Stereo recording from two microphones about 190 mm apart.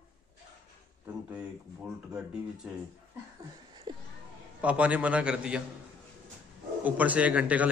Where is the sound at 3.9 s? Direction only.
25° right (ahead or behind).